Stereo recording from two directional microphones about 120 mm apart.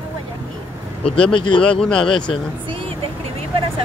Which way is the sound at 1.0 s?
45° left (ahead or behind).